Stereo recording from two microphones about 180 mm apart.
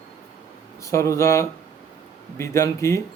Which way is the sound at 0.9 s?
15° left (ahead or behind).